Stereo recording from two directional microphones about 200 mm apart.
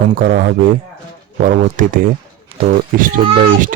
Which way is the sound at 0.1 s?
45° right (ahead or behind).